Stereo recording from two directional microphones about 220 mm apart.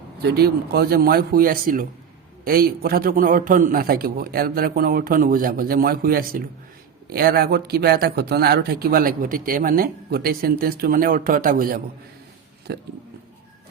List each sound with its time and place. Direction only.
0.2 s a man's voice: 45° right (ahead or behind)